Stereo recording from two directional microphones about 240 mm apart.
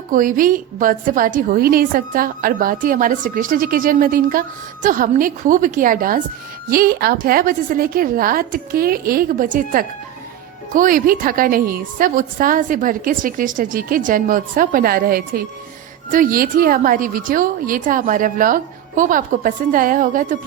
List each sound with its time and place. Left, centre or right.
0.1 s a woman's voice: right